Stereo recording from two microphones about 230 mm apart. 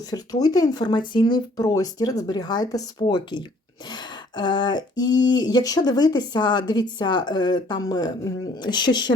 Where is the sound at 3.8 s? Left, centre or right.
Centre.